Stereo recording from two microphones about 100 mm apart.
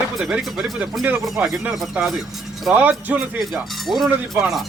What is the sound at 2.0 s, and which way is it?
Speech, 15° right (ahead or behind).